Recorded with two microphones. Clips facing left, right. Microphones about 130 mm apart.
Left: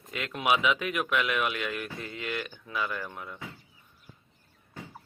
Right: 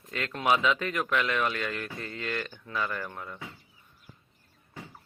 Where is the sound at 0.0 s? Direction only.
10° left (ahead or behind).